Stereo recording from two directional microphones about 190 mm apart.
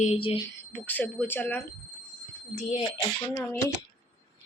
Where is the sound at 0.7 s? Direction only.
10° left (ahead or behind).